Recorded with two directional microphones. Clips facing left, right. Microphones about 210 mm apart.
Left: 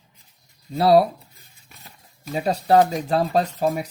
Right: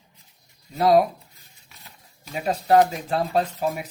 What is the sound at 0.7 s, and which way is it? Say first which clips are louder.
Speech: left 2 dB; 35° left (ahead or behind).